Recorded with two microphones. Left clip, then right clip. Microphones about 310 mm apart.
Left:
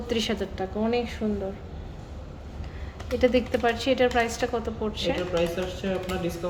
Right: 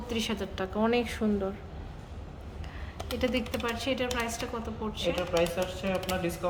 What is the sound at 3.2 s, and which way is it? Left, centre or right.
A woman's voice, centre.